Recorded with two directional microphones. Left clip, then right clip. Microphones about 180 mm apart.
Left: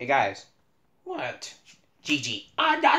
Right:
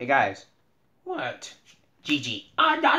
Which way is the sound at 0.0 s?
40° right (ahead or behind).